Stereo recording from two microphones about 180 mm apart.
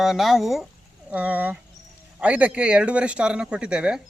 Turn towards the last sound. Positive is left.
turn(degrees=-5)  # may be behind; listen again after turning